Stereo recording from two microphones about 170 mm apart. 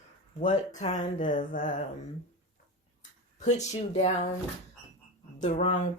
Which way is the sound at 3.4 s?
40° left (ahead or behind).